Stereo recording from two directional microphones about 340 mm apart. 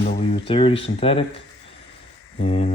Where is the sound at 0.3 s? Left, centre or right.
Centre.